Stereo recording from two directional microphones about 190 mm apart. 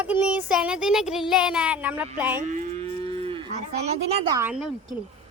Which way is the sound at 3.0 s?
30° right (ahead or behind).